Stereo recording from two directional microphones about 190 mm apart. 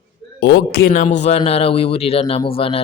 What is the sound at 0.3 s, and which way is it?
Speech, 60° left (ahead or behind).